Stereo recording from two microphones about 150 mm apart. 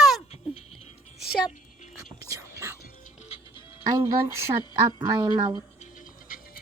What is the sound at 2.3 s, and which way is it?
Whispering, 20° right (ahead or behind).